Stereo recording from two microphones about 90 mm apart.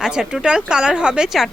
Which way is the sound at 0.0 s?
10° right (ahead or behind).